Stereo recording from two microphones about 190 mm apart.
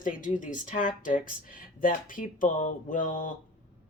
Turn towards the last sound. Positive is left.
turn(degrees=45)  # may be behind; listen again after turning